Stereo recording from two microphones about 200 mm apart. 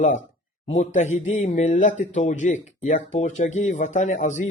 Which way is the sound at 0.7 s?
35° left (ahead or behind).